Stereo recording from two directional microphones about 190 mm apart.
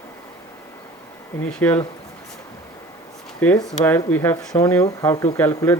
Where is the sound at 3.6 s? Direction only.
10° left (ahead or behind).